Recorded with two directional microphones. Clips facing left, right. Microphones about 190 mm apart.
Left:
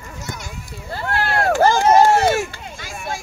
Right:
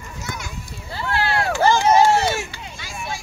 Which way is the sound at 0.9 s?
50° left (ahead or behind).